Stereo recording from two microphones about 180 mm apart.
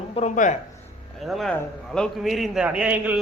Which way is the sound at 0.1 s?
40° left (ahead or behind).